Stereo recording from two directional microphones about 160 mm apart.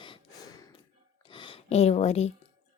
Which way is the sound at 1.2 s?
30° left (ahead or behind).